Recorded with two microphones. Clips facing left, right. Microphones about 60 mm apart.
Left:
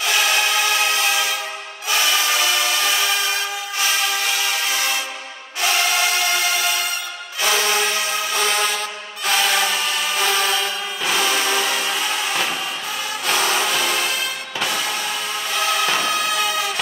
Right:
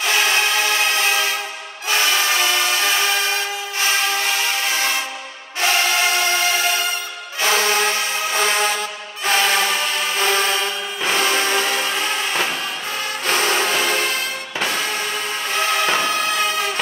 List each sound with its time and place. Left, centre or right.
0.0 s music: right
7.4 s music: right